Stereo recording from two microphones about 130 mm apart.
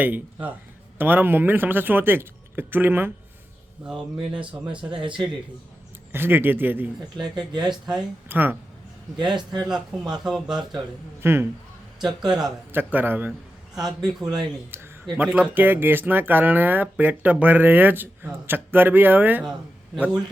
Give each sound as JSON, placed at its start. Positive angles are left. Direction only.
{"t": 0.0, "sound": "speech", "side_deg": -15}
{"t": 3.8, "sound": "speech", "side_deg": -5}
{"t": 4.9, "sound": "speech", "side_deg": -40}
{"t": 6.1, "sound": "speech", "side_deg": -15}
{"t": 7.3, "sound": "speech", "side_deg": -35}
{"t": 7.7, "sound": "speech", "side_deg": -5}
{"t": 8.3, "sound": "speech", "side_deg": -15}
{"t": 9.3, "sound": "speech", "side_deg": -35}
{"t": 9.6, "sound": "speech", "side_deg": -5}
{"t": 11.2, "sound": "a man's voice", "side_deg": -20}
{"t": 12.0, "sound": "speech", "side_deg": -35}
{"t": 12.7, "sound": "speech", "side_deg": -15}
{"t": 13.7, "sound": "speech", "side_deg": -5}
{"t": 14.7, "sound": "speech", "side_deg": -15}